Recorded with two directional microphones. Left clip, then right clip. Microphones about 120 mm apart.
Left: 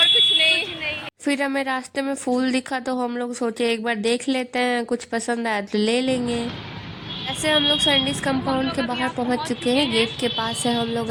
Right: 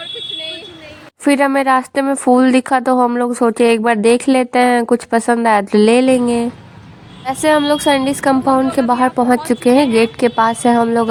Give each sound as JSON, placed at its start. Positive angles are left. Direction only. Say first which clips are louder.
{"t": 1.2, "sound": "a woman's voice", "louder": "right 11 dB", "side_deg": -35}